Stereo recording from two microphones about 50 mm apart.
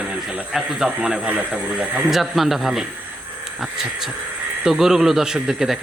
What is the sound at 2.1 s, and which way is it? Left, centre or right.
Speech, centre.